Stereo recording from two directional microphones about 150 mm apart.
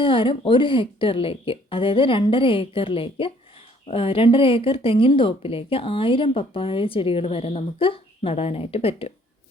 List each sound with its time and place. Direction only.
0.0 s a woman's voice: 35° left (ahead or behind)